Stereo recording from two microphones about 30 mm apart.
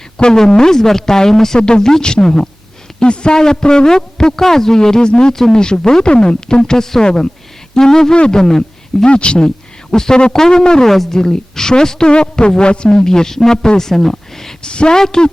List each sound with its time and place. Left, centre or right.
0.3 s speech: left
1.5 s a man's voice: left
3.0 s a man's voice: left
5.3 s speech: centre
5.5 s a man's voice: left
8.1 s speech: left
8.4 s a man's voice: centre
9.0 s speech: left
9.9 s a man's voice: left
10.8 s speech: centre
11.1 s a man's voice: left
13.1 s a man's voice: centre
14.6 s speech: left
14.9 s a man's voice: centre